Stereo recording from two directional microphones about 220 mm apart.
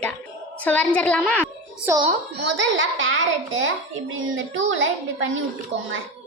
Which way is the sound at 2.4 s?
55° right (ahead or behind).